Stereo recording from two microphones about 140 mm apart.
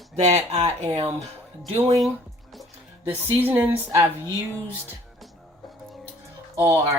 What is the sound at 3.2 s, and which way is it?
Speech, 15° right (ahead or behind).